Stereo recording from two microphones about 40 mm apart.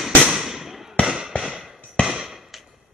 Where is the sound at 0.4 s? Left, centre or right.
Centre.